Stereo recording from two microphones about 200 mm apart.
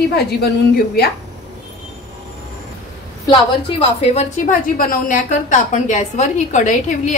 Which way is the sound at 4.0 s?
35° left (ahead or behind).